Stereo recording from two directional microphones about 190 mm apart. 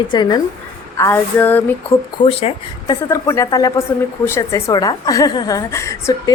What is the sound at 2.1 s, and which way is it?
Speech, 30° left (ahead or behind).